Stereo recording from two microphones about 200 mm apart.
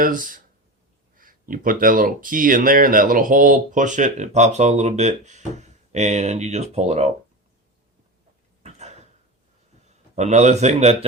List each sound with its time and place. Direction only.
0.0 s speech: 45° right (ahead or behind)
8.6 s a sound: 35° right (ahead or behind)
10.2 s speech: 35° right (ahead or behind)